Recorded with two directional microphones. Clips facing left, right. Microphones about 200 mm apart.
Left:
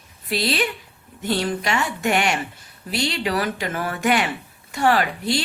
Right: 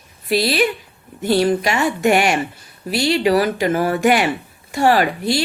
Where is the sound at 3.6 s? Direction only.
40° right (ahead or behind).